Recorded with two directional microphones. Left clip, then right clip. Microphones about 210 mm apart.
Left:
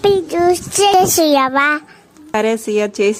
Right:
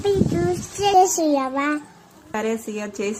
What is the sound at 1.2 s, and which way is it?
Speech, 55° left (ahead or behind).